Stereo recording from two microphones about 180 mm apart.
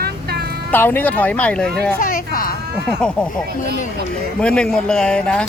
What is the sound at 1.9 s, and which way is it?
Speech, 50° left (ahead or behind).